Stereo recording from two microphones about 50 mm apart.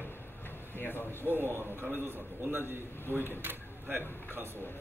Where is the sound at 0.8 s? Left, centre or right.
Left.